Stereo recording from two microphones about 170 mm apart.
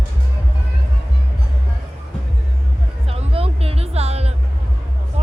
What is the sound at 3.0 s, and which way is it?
Music, 35° right (ahead or behind).